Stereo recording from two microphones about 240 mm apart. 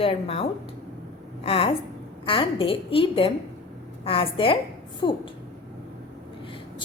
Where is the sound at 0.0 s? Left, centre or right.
Left.